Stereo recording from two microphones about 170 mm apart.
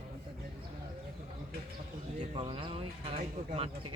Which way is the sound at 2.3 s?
30° right (ahead or behind).